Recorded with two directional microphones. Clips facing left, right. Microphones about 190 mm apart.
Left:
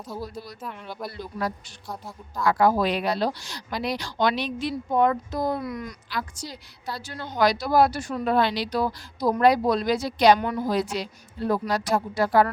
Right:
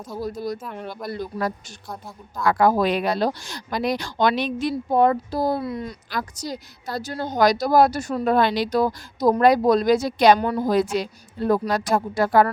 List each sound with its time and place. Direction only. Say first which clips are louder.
0.3 s a woman's voice: right 8 dB; 45° right (ahead or behind)
1.9 s a woman's voice: even; centre (ahead or behind)
2.4 s a woman's voice: right 2 dB; 50° right (ahead or behind); by 6.0 s 30° right (ahead or behind)
6.1 s a woman's voice: right 5 dB; 45° right (ahead or behind)